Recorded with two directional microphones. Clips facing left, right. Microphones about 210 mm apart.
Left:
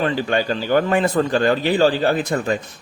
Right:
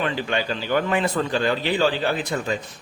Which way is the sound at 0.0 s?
40° left (ahead or behind).